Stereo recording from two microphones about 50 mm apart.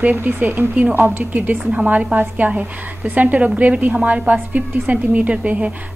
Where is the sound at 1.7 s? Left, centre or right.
Right.